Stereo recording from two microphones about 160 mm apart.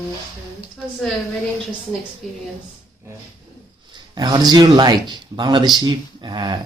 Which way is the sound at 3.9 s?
25° right (ahead or behind).